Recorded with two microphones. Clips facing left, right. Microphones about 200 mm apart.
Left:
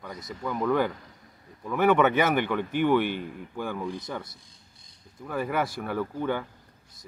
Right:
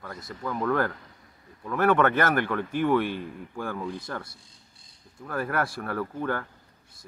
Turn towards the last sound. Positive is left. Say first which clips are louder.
# left 1 dB
turn(degrees=0)  # may be behind; listen again after turning